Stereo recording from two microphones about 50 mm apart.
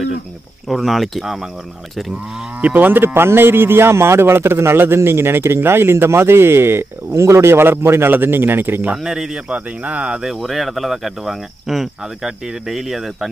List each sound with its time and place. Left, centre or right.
0.7 s speech: centre
1.2 s speech: centre
2.6 s speech: right
7.5 s speech: right
8.9 s speech: centre
9.5 s speech: right
10.2 s speech: centre